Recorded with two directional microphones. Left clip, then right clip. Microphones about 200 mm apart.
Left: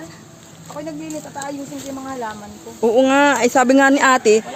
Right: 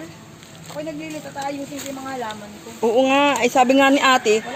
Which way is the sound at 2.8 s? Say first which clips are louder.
Left 3 dB; 20° left (ahead or behind).